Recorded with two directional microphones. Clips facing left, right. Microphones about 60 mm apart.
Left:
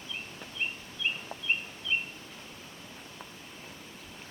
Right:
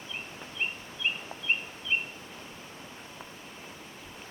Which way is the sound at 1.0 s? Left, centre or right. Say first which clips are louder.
Right 1 dB; right.